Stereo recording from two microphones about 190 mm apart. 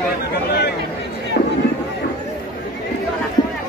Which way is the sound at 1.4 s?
55° left (ahead or behind).